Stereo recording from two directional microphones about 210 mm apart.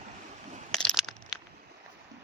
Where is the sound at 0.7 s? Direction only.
Centre (ahead or behind).